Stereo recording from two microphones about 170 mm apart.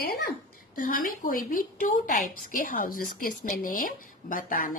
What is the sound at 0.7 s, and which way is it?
A woman's voice, 55° left (ahead or behind).